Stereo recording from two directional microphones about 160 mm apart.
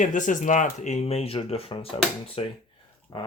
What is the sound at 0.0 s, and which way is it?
Speech, 50° left (ahead or behind).